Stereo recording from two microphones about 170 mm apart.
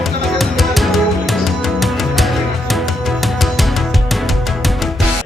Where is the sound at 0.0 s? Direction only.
Centre (ahead or behind).